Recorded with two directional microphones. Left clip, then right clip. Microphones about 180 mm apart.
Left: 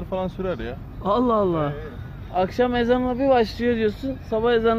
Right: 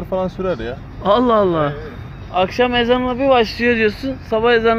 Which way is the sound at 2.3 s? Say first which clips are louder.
Right 6 dB; 25° left (ahead or behind).